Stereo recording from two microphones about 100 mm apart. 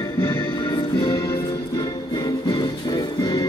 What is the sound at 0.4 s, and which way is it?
Music, 55° left (ahead or behind).